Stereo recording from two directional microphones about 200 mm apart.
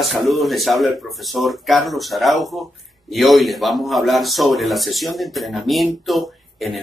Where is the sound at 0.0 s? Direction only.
Centre (ahead or behind).